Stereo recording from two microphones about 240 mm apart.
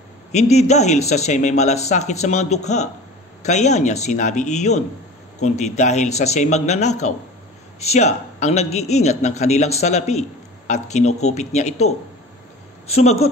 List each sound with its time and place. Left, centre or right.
0.3 s a man's voice: left